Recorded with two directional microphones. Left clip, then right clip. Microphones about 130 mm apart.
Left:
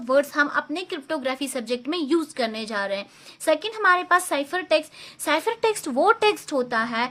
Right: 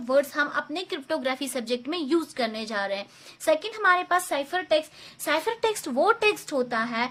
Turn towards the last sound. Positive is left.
turn(degrees=25)  # may be behind; listen again after turning